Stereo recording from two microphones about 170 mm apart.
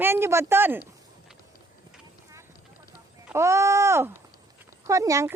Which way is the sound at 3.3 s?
15° right (ahead or behind).